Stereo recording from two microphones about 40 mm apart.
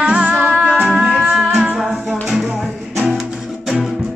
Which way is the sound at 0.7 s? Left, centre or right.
Centre.